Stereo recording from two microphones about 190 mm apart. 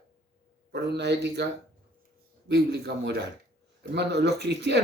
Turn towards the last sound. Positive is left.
turn(degrees=-65)  # may be behind; listen again after turning